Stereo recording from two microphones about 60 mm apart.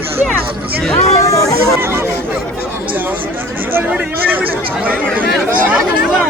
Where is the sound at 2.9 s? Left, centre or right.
Right.